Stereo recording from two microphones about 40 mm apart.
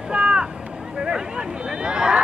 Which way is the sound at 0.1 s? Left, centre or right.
Right.